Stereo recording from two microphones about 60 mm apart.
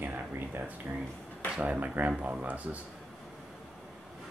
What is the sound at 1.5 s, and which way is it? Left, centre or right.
Speech, right.